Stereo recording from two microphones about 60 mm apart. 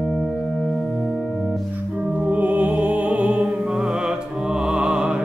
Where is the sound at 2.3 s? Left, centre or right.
Right.